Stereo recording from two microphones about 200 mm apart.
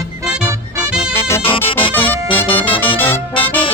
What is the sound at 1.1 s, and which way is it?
Music, 10° left (ahead or behind).